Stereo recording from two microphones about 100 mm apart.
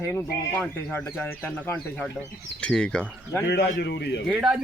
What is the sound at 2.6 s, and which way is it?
Speech, 10° left (ahead or behind).